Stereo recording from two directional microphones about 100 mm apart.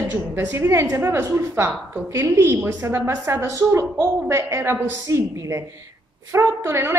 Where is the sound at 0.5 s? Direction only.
25° right (ahead or behind).